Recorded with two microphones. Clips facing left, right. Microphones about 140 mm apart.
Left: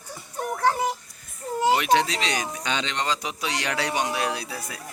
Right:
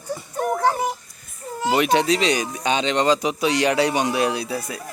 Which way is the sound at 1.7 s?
15° right (ahead or behind).